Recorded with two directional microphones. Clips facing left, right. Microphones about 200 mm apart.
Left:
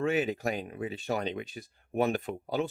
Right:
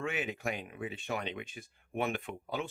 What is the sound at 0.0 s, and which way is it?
Speech, 35° left (ahead or behind).